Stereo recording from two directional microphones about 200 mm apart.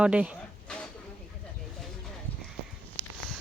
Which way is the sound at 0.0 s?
5° right (ahead or behind).